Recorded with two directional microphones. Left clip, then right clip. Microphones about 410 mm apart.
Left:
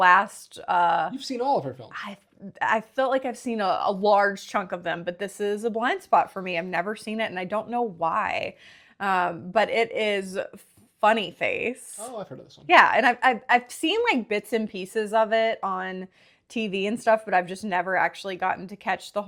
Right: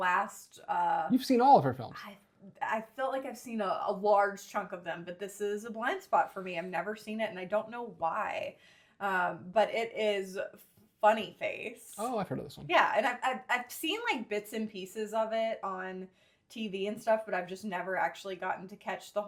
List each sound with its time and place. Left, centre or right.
0.0 s a woman's voice: left
1.1 s speech: right
2.6 s a woman's voice: left
11.9 s speech: centre
12.6 s a woman's voice: left